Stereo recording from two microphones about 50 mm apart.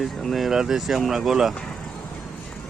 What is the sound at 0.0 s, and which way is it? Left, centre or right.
Speech, centre.